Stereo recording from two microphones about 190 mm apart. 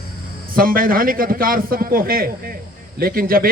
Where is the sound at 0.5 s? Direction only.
50° right (ahead or behind).